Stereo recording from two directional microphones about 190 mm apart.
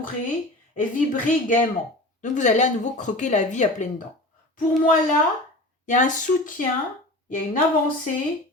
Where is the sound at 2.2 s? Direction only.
40° left (ahead or behind).